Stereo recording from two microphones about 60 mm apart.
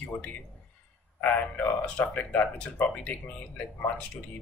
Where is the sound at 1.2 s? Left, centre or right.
Left.